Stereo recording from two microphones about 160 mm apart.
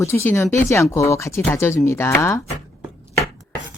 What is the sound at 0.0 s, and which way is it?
Speech, 15° left (ahead or behind).